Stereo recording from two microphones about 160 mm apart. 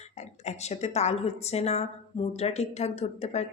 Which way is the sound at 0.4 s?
45° left (ahead or behind).